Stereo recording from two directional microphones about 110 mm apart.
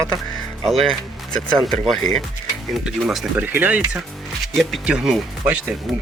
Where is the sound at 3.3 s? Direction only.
15° right (ahead or behind).